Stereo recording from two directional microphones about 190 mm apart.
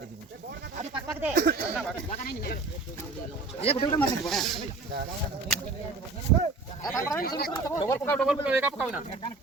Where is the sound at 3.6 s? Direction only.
35° left (ahead or behind).